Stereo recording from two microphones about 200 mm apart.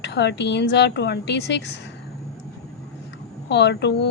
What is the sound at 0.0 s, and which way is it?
A woman's voice, 60° left (ahead or behind).